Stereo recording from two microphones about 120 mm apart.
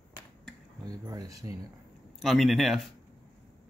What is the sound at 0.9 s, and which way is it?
Speech, 30° right (ahead or behind).